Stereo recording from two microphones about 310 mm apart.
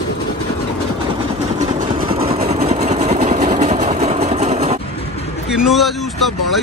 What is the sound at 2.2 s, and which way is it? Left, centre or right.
Vehicle, centre.